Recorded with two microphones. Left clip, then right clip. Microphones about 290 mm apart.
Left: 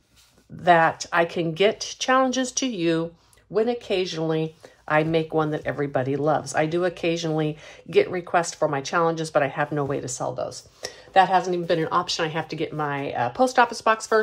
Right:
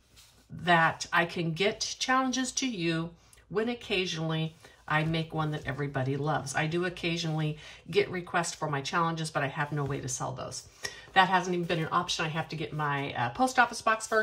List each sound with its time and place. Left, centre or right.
0.7 s speech: centre